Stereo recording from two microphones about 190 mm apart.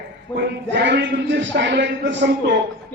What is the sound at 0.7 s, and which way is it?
A man's voice, 65° right (ahead or behind).